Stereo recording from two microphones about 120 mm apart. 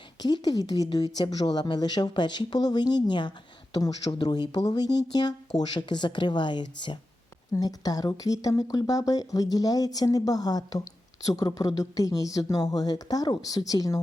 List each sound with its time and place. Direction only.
0.2 s speech: 35° left (ahead or behind)